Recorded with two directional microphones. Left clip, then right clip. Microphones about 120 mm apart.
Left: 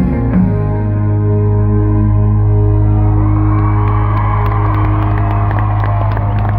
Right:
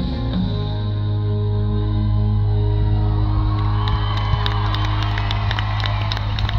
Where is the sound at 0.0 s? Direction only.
45° right (ahead or behind).